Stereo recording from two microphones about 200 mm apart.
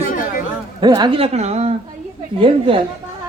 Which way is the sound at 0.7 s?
20° right (ahead or behind).